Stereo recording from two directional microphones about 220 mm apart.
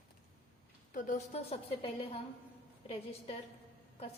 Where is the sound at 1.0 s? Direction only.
35° left (ahead or behind).